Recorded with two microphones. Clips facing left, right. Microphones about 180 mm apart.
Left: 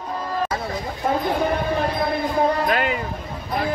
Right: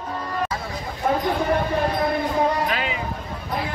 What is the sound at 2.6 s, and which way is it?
Music, 50° left (ahead or behind).